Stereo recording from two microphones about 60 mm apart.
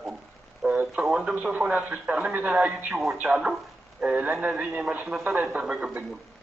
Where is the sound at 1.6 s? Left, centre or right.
Right.